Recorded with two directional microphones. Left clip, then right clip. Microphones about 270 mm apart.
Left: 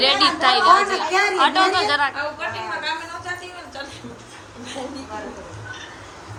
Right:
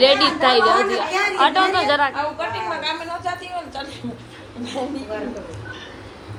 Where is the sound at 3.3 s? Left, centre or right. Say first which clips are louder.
Right 4 dB; centre.